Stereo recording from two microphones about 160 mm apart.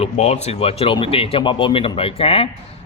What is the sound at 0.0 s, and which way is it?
A man's voice, 45° left (ahead or behind).